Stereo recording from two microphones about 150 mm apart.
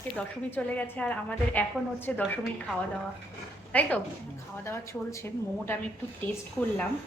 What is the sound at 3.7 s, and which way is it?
A woman's voice, 10° left (ahead or behind).